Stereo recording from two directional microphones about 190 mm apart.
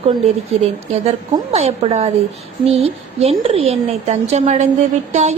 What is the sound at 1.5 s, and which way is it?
A woman's voice, 35° right (ahead or behind).